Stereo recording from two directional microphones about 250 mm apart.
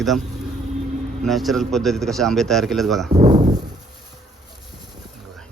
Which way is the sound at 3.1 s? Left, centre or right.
Right.